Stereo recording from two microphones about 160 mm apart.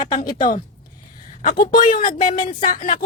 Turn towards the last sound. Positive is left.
turn(degrees=55)  # may be behind; listen again after turning